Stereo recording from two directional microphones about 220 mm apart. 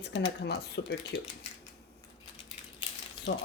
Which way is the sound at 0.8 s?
50° left (ahead or behind).